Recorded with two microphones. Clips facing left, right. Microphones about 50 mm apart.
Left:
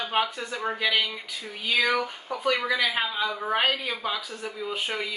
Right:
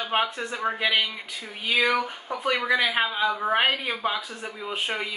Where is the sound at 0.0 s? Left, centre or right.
Centre.